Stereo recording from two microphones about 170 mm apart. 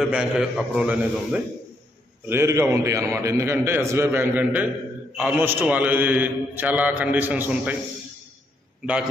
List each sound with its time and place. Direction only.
0.0 s a man's voice: 5° right (ahead or behind)
2.2 s a man's voice: 15° right (ahead or behind)
8.8 s a man's voice: 5° right (ahead or behind)